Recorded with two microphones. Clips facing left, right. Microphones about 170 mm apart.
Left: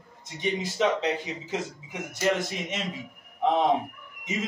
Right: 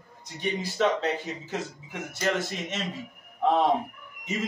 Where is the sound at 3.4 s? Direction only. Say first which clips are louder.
Right 1 dB; 15° left (ahead or behind).